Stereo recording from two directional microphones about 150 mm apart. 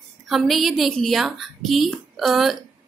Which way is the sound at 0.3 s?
Centre (ahead or behind).